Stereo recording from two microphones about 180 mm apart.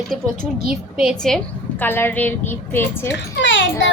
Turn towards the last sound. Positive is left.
turn(degrees=90)